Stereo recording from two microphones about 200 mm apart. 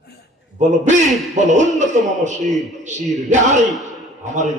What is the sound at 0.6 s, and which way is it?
A man's voice, 35° right (ahead or behind).